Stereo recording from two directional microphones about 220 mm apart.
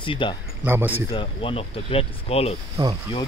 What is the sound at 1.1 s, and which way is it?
Speech, 25° left (ahead or behind).